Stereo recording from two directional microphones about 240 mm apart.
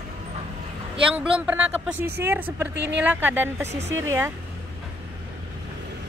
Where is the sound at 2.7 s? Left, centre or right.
Right.